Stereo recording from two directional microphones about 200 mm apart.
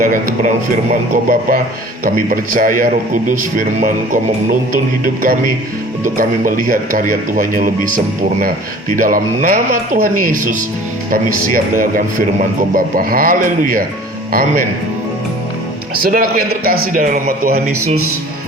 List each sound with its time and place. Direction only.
0.0 s speech: 45° right (ahead or behind)
5.2 s speech: 45° right (ahead or behind)
16.0 s speech: 50° right (ahead or behind)